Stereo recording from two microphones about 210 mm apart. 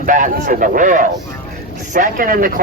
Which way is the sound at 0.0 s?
40° right (ahead or behind).